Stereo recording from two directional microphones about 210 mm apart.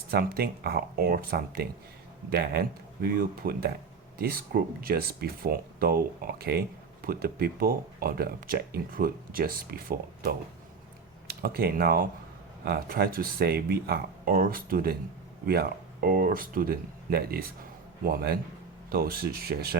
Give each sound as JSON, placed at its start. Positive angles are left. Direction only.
{"t": 0.1, "sound": "speech", "side_deg": -45}